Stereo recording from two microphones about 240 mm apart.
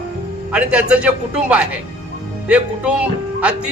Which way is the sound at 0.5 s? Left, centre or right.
Centre.